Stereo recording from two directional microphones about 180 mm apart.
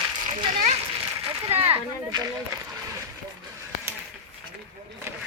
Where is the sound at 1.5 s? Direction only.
30° right (ahead or behind).